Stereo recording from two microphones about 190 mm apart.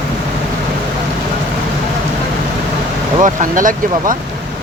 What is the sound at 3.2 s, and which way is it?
Speech, 45° right (ahead or behind).